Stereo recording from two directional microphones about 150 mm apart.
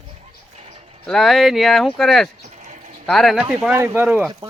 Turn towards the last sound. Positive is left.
turn(degrees=-5)  # may be behind; listen again after turning